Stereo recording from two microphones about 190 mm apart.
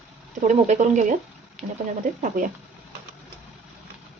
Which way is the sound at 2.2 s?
40° right (ahead or behind).